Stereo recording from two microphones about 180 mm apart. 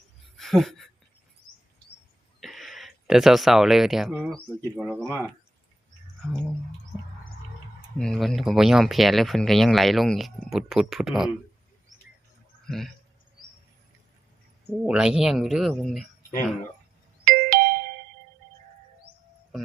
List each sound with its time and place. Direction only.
0.3 s a sound: centre (ahead or behind)
2.4 s speech: centre (ahead or behind)
7.9 s speech: 5° left (ahead or behind)
12.6 s speech: centre (ahead or behind)
14.7 s speech: 5° right (ahead or behind)
17.2 s ding-dong: 50° right (ahead or behind)
19.5 s music: centre (ahead or behind)